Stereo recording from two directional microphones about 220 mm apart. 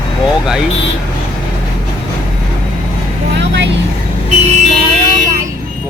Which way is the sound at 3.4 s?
55° right (ahead or behind).